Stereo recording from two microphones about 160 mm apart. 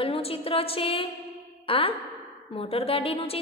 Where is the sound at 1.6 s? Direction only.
35° left (ahead or behind).